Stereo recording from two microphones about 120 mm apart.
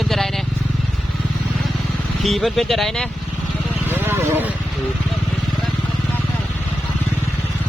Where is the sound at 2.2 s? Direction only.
Centre (ahead or behind).